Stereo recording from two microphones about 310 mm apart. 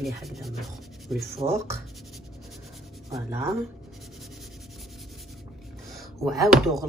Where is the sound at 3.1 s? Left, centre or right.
Centre.